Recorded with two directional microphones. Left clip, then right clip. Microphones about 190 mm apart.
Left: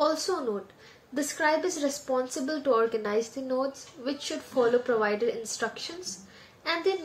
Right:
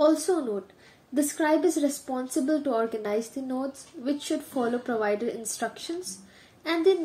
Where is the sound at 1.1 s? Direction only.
40° right (ahead or behind).